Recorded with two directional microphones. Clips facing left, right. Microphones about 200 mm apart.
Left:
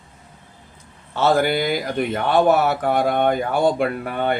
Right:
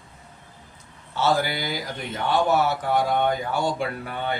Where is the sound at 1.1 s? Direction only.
60° left (ahead or behind).